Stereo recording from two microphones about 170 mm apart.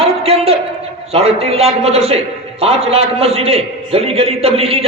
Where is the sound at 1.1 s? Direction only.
35° right (ahead or behind).